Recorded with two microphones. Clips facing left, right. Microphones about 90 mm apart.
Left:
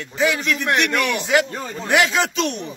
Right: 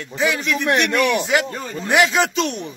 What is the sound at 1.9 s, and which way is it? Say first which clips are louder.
Speech: right 1 dB; 20° right (ahead or behind).